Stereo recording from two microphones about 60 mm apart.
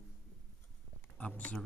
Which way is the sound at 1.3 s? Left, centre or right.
Left.